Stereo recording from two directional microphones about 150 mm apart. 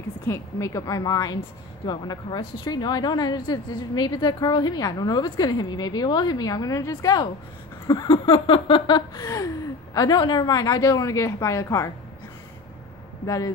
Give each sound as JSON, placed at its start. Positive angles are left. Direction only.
{"t": 0.3, "sound": "a woman's voice", "side_deg": 20}
{"t": 7.8, "sound": "a sound", "side_deg": 30}
{"t": 9.9, "sound": "a woman's voice", "side_deg": 30}